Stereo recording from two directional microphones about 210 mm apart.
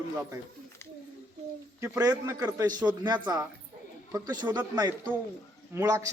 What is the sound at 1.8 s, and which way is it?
A man's voice, 15° right (ahead or behind).